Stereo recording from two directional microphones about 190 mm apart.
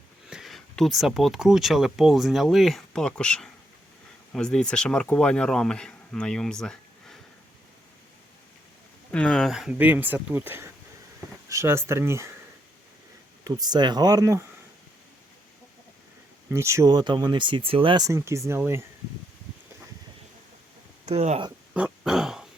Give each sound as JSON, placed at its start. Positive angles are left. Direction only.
{"t": 0.3, "sound": "speech", "side_deg": 0}
{"t": 9.1, "sound": "speech", "side_deg": 5}
{"t": 13.4, "sound": "speech", "side_deg": -20}
{"t": 16.5, "sound": "speech", "side_deg": -15}
{"t": 21.0, "sound": "speech", "side_deg": -35}
{"t": 21.7, "sound": "a sound", "side_deg": -5}